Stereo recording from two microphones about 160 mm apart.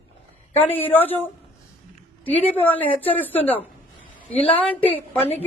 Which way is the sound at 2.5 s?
10° left (ahead or behind).